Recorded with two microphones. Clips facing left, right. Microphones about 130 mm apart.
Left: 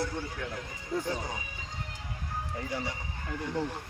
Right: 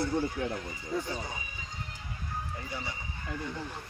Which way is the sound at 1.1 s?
90° left.